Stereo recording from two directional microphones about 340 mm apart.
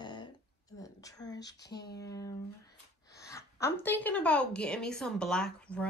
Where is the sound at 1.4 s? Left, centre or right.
Left.